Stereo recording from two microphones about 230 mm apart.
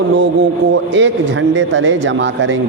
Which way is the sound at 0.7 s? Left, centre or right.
Right.